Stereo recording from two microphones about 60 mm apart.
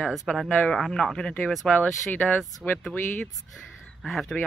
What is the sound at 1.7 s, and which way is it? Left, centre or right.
Speech, left.